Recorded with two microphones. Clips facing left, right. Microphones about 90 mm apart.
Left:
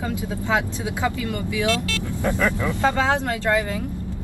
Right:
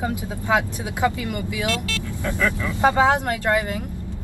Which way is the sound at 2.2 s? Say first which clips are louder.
Left 2 dB; 20° left (ahead or behind).